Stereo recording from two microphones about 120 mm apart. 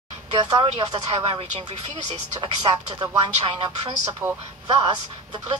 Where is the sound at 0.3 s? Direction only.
40° right (ahead or behind).